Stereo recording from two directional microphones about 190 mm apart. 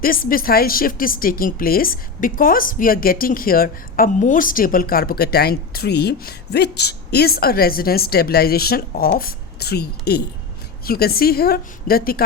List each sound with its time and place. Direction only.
0.0 s speech: 50° left (ahead or behind)